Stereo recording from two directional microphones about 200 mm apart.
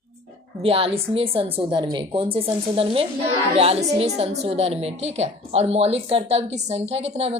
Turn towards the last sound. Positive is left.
turn(degrees=-30)  # may be behind; listen again after turning